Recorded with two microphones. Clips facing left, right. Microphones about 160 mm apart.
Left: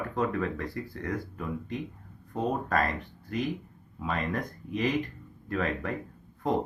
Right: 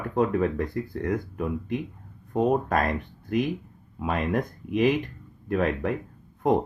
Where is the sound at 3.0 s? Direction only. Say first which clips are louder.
Right 7 dB; 55° right (ahead or behind).